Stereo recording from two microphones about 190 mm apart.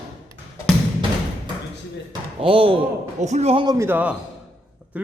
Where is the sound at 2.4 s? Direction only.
30° right (ahead or behind).